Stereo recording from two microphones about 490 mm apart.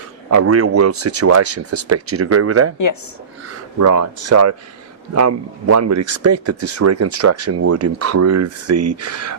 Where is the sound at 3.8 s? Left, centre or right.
Right.